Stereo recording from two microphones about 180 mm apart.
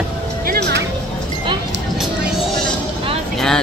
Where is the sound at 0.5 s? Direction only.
70° right (ahead or behind).